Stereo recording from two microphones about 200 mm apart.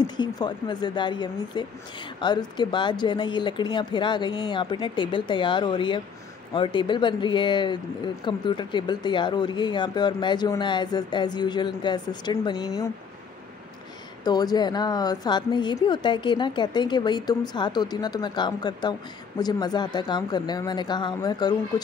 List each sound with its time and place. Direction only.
0.0 s speech: 20° left (ahead or behind)
14.2 s speech: 20° left (ahead or behind)